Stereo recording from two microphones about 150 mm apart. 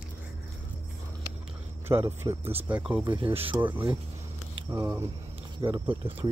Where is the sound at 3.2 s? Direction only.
40° right (ahead or behind).